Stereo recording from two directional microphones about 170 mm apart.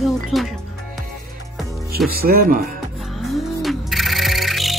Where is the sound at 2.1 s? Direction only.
60° right (ahead or behind).